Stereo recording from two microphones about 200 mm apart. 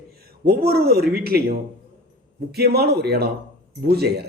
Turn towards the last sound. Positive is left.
turn(degrees=-55)  # may be behind; listen again after turning